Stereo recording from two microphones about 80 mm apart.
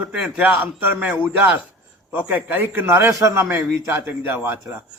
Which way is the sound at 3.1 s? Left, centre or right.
Right.